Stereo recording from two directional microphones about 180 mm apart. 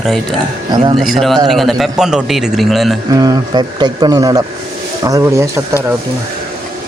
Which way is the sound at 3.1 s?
20° right (ahead or behind).